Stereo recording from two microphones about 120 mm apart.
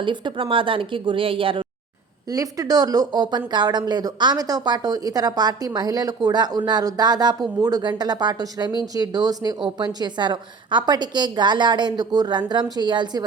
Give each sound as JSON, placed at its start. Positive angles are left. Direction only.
{"t": 0.0, "sound": "a woman's voice", "side_deg": -40}
{"t": 2.3, "sound": "speech", "side_deg": -30}